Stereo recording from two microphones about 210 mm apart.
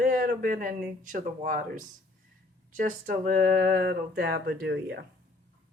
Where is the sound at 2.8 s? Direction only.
40° right (ahead or behind).